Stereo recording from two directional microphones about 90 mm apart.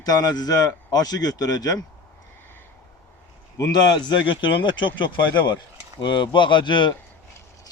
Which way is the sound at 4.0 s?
60° left (ahead or behind).